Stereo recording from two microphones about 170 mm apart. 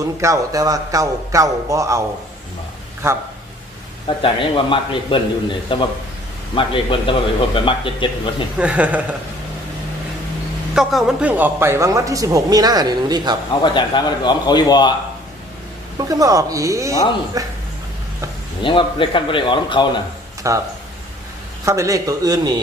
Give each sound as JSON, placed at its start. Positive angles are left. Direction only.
{"t": 0.0, "sound": "speech", "side_deg": -20}
{"t": 3.0, "sound": "speech", "side_deg": -15}
{"t": 4.2, "sound": "speech", "side_deg": 30}
{"t": 8.5, "sound": "speech", "side_deg": -10}
{"t": 10.8, "sound": "speech", "side_deg": 0}
{"t": 13.6, "sound": "speech", "side_deg": 25}
{"t": 16.0, "sound": "speech", "side_deg": -20}
{"t": 18.6, "sound": "speech", "side_deg": 30}
{"t": 20.4, "sound": "speech", "side_deg": -20}